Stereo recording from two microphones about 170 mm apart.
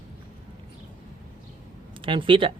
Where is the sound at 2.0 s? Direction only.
30° right (ahead or behind).